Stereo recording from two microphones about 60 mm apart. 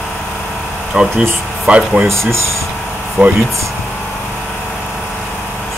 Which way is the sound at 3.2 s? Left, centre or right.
Centre.